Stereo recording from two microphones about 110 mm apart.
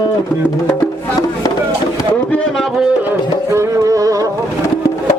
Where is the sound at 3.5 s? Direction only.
30° right (ahead or behind).